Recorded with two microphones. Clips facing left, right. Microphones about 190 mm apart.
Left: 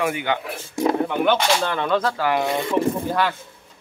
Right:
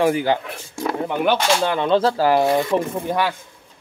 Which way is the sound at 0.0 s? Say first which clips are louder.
Right 5 dB; 35° right (ahead or behind).